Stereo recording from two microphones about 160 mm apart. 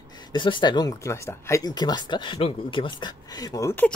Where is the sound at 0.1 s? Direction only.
30° left (ahead or behind).